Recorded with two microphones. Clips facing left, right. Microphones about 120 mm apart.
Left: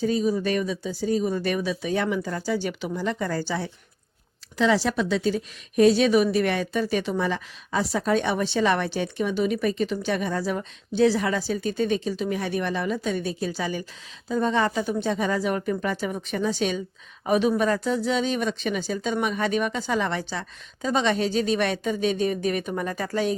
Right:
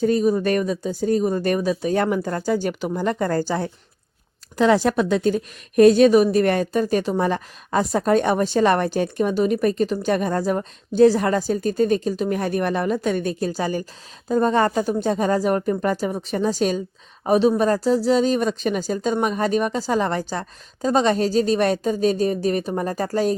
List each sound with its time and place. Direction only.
0.0 s a woman's voice: 55° right (ahead or behind)